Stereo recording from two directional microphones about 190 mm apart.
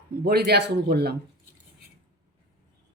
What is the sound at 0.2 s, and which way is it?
Speech, 55° right (ahead or behind).